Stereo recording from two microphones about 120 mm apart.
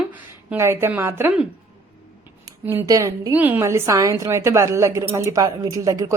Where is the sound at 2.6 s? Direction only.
15° right (ahead or behind).